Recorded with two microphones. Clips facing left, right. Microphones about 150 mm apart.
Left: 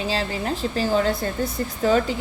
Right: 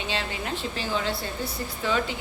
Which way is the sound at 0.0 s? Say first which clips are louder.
Left 6 dB; 35° left (ahead or behind).